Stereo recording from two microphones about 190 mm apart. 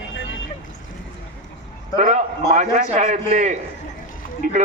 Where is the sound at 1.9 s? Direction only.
40° right (ahead or behind).